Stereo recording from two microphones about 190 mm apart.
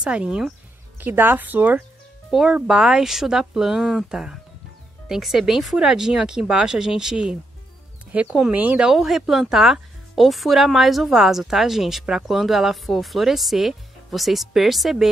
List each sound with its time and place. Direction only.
0.0 s speech: 5° right (ahead or behind)